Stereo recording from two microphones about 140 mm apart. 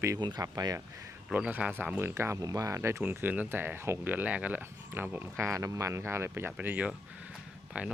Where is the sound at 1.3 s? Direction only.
10° right (ahead or behind).